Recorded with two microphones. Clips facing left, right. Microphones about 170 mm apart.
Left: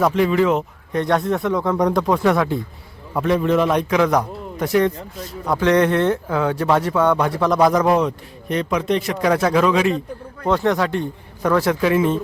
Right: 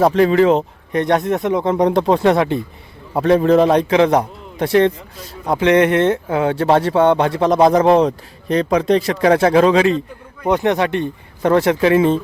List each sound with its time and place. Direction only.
0.0 s speech: 30° right (ahead or behind)
0.9 s speech: 20° right (ahead or behind)
10.4 s speech: 15° right (ahead or behind)